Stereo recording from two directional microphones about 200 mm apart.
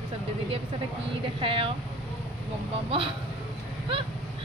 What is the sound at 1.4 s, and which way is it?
Speech, 25° right (ahead or behind).